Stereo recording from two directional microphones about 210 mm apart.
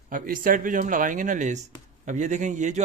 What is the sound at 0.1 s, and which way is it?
Speech, 40° right (ahead or behind).